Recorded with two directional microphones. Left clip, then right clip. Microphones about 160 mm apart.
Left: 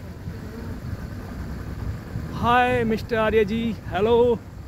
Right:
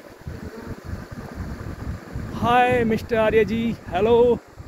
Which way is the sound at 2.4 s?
5° right (ahead or behind).